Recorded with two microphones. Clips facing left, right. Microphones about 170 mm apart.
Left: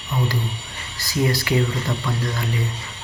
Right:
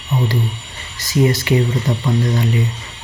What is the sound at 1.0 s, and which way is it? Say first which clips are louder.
Speech: right 6 dB; 20° right (ahead or behind).